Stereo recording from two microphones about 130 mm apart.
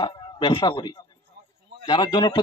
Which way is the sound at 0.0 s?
35° left (ahead or behind).